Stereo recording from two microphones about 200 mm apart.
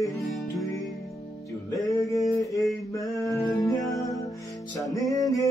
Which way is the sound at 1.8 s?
15° left (ahead or behind).